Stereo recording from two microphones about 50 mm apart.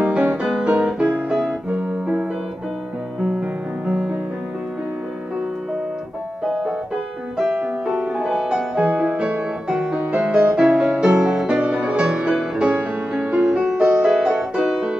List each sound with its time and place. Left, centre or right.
0.0 s music: right
3.2 s music: centre
6.4 s music: centre
7.8 s music: centre